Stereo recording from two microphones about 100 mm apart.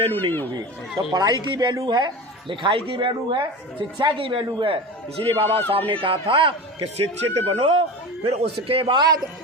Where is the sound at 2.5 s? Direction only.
55° right (ahead or behind).